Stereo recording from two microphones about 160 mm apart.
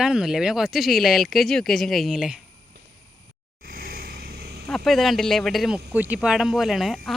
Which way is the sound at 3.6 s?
65° right (ahead or behind).